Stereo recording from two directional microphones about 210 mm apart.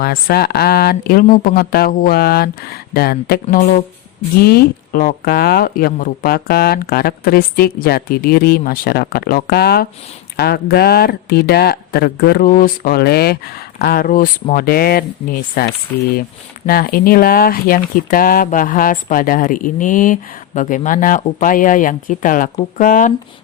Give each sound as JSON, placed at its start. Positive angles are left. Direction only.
{"t": 0.0, "sound": "speech", "side_deg": 45}